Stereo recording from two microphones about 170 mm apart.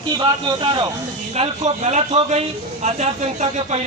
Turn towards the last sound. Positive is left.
turn(degrees=-40)  # may be behind; listen again after turning